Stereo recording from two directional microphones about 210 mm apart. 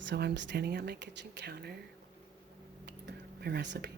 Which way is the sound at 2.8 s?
50° right (ahead or behind).